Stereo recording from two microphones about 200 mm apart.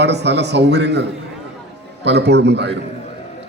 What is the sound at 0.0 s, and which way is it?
A man's voice, 55° right (ahead or behind).